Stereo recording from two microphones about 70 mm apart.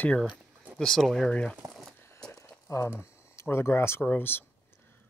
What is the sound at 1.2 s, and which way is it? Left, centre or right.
Speech, centre.